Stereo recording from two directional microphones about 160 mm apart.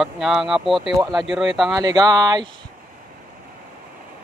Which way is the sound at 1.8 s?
25° right (ahead or behind).